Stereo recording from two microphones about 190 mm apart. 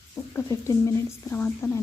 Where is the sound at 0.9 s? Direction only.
10° left (ahead or behind).